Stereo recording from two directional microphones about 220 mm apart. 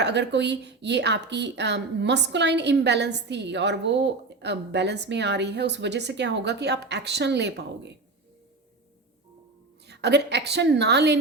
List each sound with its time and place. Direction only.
0.0 s a woman's voice: 50° right (ahead or behind)
9.8 s a woman's voice: 50° right (ahead or behind)